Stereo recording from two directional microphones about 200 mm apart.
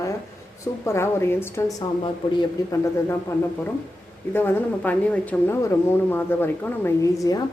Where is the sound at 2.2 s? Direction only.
25° left (ahead or behind).